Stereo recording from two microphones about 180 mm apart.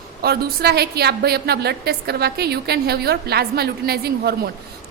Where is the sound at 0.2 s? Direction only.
60° right (ahead or behind).